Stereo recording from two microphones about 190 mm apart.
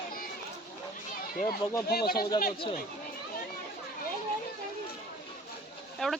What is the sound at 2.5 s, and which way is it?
Speech, 25° left (ahead or behind).